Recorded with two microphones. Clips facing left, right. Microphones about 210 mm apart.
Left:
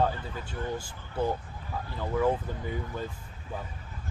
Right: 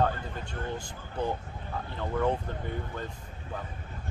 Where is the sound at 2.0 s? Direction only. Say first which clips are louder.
Left 2 dB; 5° left (ahead or behind).